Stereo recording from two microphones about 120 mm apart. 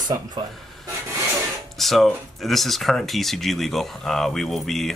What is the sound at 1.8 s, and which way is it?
Speech, centre (ahead or behind).